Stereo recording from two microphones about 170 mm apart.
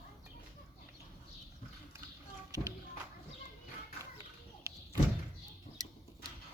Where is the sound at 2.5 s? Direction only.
20° right (ahead or behind).